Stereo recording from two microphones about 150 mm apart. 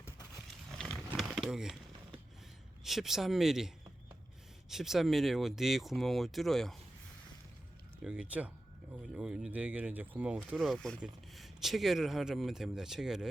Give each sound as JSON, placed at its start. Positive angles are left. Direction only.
{"t": 0.8, "sound": "crumpling", "side_deg": 0}
{"t": 2.8, "sound": "speech", "side_deg": 0}
{"t": 4.7, "sound": "speech", "side_deg": 0}
{"t": 8.0, "sound": "speech", "side_deg": -5}
{"t": 10.6, "sound": "speech", "side_deg": 0}